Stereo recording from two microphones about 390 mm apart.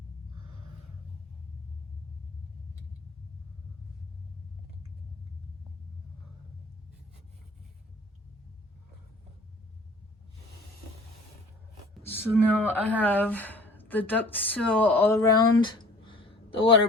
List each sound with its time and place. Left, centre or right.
12.0 s speech: centre